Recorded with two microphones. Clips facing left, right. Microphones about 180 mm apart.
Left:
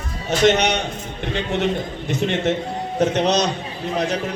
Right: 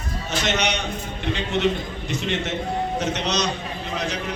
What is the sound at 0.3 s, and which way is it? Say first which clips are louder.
Speech: left 8 dB; 55° left (ahead or behind).